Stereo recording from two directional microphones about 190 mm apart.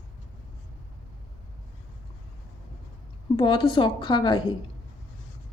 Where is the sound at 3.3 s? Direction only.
25° left (ahead or behind).